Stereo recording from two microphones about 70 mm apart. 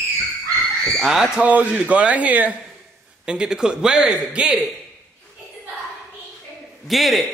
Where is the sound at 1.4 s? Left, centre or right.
Right.